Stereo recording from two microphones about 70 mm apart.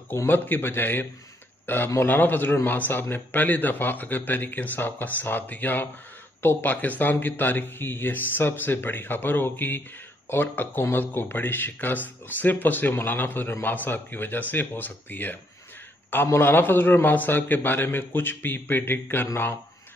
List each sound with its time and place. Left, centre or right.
0.1 s a man's voice: left